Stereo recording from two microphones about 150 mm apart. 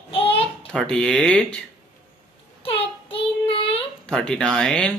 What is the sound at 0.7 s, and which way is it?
Speech, 5° left (ahead or behind).